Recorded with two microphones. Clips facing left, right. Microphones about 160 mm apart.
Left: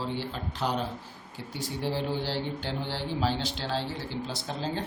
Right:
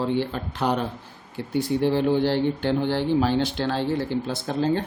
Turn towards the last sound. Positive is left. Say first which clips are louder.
# right 9 dB
turn(degrees=-55)  # may be behind; listen again after turning